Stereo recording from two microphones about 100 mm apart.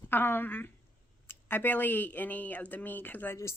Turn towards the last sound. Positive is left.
turn(degrees=20)  # may be behind; listen again after turning